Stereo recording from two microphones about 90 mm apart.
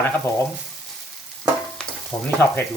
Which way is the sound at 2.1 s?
40° left (ahead or behind).